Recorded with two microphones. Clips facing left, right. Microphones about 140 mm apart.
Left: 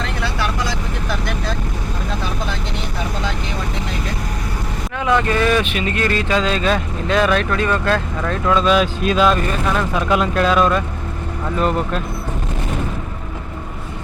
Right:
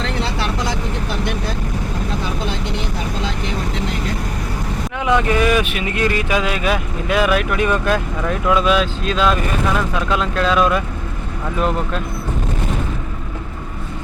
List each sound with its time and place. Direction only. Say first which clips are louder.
5.0 s speech: even; 15° right (ahead or behind)
8.8 s speech: left 2 dB; 5° left (ahead or behind)